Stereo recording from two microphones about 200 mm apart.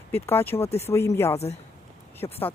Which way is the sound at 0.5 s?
30° left (ahead or behind).